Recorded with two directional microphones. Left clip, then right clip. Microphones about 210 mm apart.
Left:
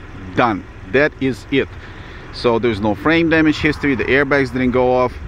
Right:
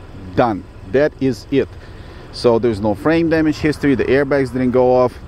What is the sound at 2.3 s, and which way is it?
Speech, 15° right (ahead or behind).